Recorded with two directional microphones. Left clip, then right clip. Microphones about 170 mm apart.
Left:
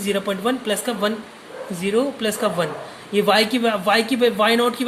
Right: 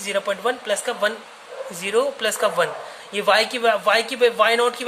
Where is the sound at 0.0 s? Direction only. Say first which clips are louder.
Even; 15° right (ahead or behind).